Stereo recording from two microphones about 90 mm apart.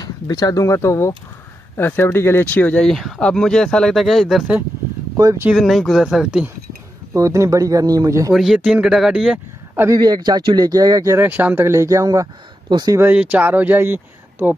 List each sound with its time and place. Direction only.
0.0 s speech: 45° left (ahead or behind); by 2.4 s 30° left (ahead or behind)
2.4 s speech: 15° left (ahead or behind)
2.9 s speech: centre (ahead or behind)
5.5 s speech: centre (ahead or behind)
7.2 s speech: 35° right (ahead or behind)
8.5 s speech: 15° right (ahead or behind)
8.8 s speech: 5° right (ahead or behind)
9.9 s speech: 50° right (ahead or behind)
11.1 s speech: 20° right (ahead or behind); by 12.3 s 40° right (ahead or behind)
12.6 s speech: 50° right (ahead or behind)
13.1 s speech: 15° right (ahead or behind)